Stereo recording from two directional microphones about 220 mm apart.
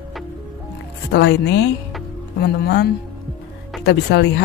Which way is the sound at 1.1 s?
50° left (ahead or behind).